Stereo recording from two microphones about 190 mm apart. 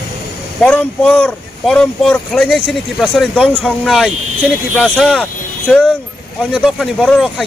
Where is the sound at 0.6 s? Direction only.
5° left (ahead or behind).